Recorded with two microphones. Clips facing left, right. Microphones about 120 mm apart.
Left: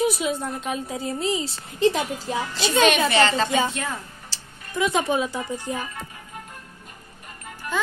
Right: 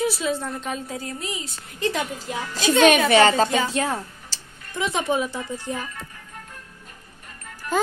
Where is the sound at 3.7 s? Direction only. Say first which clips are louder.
Right 6 dB; 30° right (ahead or behind).